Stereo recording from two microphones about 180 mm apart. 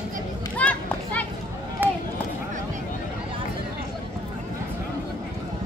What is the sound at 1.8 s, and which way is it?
Run, 10° right (ahead or behind).